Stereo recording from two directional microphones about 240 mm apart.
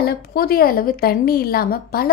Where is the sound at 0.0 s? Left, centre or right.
Left.